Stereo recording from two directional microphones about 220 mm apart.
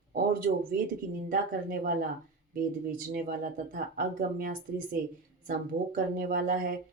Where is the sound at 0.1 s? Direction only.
40° right (ahead or behind).